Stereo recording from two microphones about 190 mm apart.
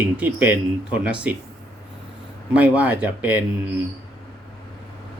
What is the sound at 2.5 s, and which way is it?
Speech, 5° right (ahead or behind).